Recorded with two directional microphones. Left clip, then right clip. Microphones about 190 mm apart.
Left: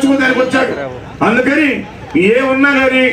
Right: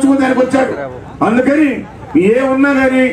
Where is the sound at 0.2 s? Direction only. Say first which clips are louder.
Even; 55° right (ahead or behind).